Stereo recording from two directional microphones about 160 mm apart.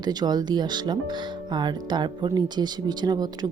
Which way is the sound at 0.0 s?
25° right (ahead or behind).